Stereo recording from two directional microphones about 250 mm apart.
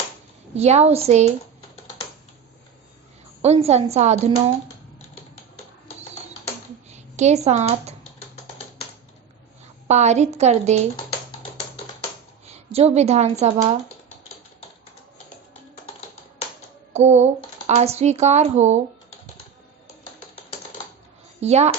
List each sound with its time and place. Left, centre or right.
0.5 s speech: right
3.4 s speech: right
7.2 s speech: right
9.8 s speech: right
12.7 s speech: right
16.9 s a sound: right
17.7 s speech: right
21.4 s speech: right